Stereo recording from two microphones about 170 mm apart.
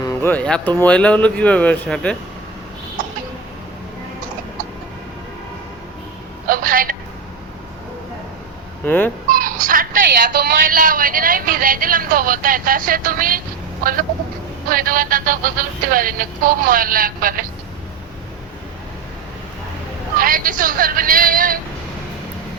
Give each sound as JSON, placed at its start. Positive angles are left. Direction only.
{"t": 0.0, "sound": "speech", "side_deg": 15}
{"t": 6.5, "sound": "telephone", "side_deg": -55}
{"t": 8.8, "sound": "speech", "side_deg": 10}
{"t": 9.3, "sound": "speech", "side_deg": -55}
{"t": 14.7, "sound": "speech", "side_deg": -55}
{"t": 20.1, "sound": "speech", "side_deg": -55}